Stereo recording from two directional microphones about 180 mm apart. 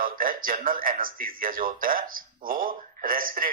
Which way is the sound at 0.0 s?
50° right (ahead or behind).